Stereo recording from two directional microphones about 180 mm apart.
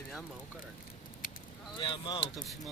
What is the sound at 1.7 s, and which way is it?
Speech, 25° left (ahead or behind).